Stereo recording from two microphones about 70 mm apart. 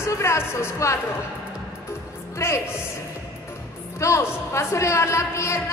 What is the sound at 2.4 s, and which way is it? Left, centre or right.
Speech, left.